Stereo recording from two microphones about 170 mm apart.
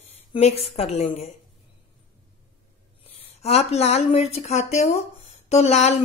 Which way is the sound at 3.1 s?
40° left (ahead or behind).